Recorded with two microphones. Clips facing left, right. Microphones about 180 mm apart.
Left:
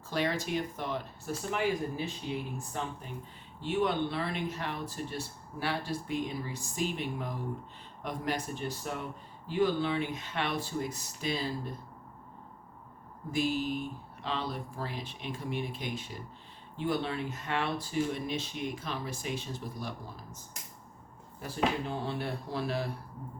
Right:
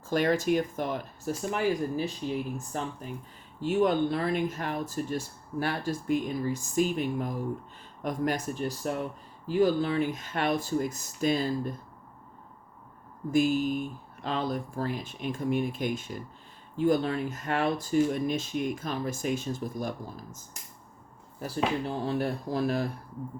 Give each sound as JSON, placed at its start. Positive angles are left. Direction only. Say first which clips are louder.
{"t": 0.1, "sound": "speech", "louder": "right 7 dB", "side_deg": -50}
{"t": 3.6, "sound": "speech", "louder": "right 5 dB", "side_deg": -45}
{"t": 13.3, "sound": "speech", "louder": "right 6 dB", "side_deg": -45}
{"t": 21.4, "sound": "speech", "louder": "right 2 dB", "side_deg": -40}